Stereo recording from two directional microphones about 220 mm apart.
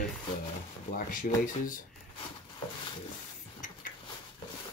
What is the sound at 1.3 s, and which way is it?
Speech, 40° left (ahead or behind).